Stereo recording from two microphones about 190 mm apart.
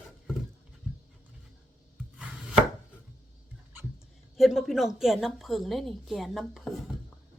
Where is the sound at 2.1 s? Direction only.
5° right (ahead or behind).